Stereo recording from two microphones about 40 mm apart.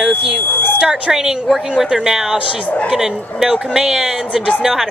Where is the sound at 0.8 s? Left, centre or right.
Right.